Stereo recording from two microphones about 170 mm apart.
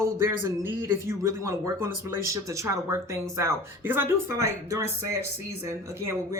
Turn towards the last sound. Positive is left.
turn(degrees=-15)  # may be behind; listen again after turning